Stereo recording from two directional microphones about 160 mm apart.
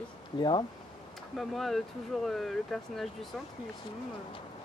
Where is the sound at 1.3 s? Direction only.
Centre (ahead or behind).